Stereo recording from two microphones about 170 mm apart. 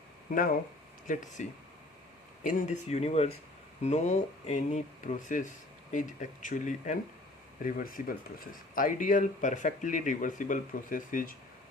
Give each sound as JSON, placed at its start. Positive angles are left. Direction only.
{"t": 1.0, "sound": "speech", "side_deg": 50}